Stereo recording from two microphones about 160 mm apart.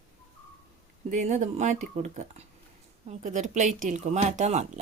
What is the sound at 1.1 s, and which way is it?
Speech, 50° right (ahead or behind).